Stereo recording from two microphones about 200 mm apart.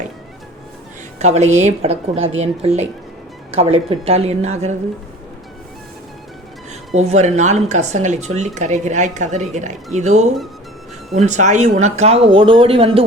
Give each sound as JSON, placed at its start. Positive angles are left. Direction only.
{"t": 1.2, "sound": "speech", "side_deg": -35}
{"t": 6.9, "sound": "speech", "side_deg": -35}